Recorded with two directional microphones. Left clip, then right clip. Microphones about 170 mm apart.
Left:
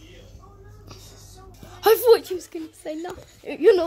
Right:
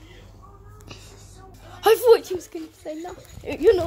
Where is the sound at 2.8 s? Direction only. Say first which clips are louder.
Left 2 dB; 20° left (ahead or behind).